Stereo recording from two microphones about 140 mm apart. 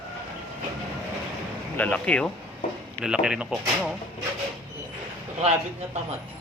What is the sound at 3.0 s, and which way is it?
Speech, 5° right (ahead or behind).